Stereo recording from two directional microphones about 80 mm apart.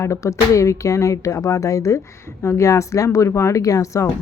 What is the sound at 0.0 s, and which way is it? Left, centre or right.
Speech, left.